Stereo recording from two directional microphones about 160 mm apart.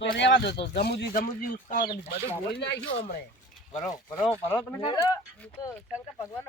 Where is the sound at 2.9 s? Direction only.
55° left (ahead or behind).